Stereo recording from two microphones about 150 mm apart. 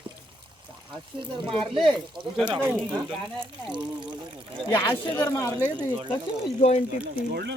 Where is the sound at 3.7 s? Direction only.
30° right (ahead or behind).